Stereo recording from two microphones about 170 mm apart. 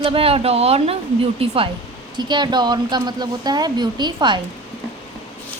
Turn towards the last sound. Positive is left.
turn(degrees=-25)  # may be behind; listen again after turning